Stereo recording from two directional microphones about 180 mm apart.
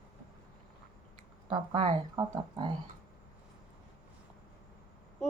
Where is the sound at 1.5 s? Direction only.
25° right (ahead or behind).